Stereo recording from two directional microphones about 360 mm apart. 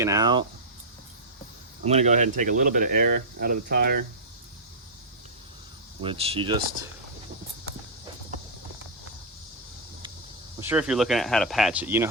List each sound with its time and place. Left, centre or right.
0.0 s speech: centre
1.8 s speech: centre
6.0 s speech: centre
10.6 s speech: centre